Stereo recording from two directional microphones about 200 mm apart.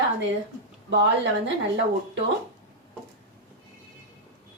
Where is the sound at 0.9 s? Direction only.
60° right (ahead or behind).